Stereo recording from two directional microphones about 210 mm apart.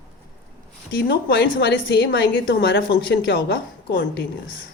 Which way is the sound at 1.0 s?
50° left (ahead or behind).